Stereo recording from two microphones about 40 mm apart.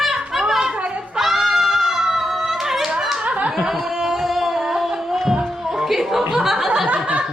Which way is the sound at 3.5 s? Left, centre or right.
Centre.